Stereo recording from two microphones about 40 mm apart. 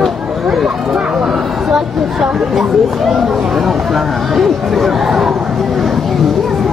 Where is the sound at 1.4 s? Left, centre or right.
Centre.